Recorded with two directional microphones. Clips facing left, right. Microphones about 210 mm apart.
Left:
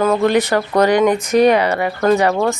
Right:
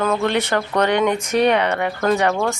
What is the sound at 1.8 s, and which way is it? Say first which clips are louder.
Speech: left 4 dB; 10° left (ahead or behind).